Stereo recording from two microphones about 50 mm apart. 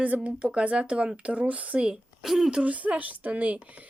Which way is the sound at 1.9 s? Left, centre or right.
Centre.